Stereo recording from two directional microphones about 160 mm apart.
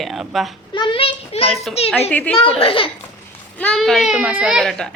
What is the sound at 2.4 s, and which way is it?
Speech, 35° left (ahead or behind).